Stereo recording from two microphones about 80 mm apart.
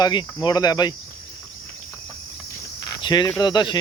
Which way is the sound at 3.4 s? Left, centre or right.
Left.